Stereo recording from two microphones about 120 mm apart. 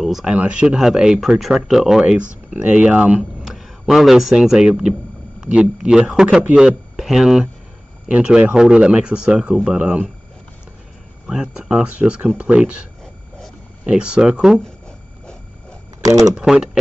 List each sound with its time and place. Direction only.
0.0 s speech: 5° right (ahead or behind)
11.2 s speech: 5° right (ahead or behind)
13.8 s speech: 10° right (ahead or behind)
16.0 s speech: 30° right (ahead or behind)
16.3 s speech: 5° right (ahead or behind)